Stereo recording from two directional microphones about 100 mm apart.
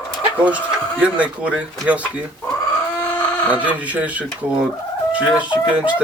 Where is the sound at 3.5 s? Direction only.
15° right (ahead or behind).